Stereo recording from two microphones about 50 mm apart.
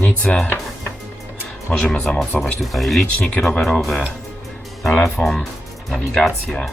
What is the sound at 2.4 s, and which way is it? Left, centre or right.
Speech, centre.